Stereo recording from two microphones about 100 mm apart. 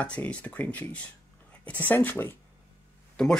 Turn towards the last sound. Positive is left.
turn(degrees=5)  # may be behind; listen again after turning